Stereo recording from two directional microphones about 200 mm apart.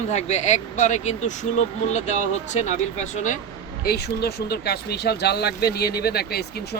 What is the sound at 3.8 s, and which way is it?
Speech, 55° left (ahead or behind).